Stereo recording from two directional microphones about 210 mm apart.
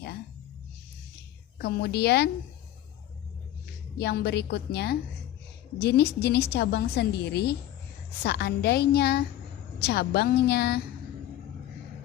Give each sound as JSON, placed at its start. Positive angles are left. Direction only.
{"t": 1.5, "sound": "a woman's voice", "side_deg": 50}
{"t": 3.9, "sound": "a woman's voice", "side_deg": 50}